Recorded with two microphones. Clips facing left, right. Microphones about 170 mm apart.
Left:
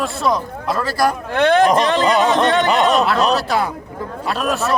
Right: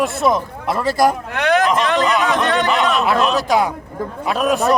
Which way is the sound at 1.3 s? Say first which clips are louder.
Left 3 dB; 30° left (ahead or behind).